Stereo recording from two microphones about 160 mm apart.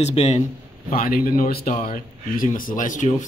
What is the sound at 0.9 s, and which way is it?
Speech, 65° left (ahead or behind).